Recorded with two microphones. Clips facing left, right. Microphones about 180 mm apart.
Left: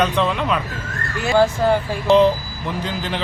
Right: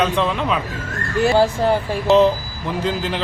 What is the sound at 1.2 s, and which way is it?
Speech, 35° right (ahead or behind).